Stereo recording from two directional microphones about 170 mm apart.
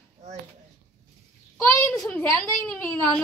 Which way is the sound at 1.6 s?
5° left (ahead or behind).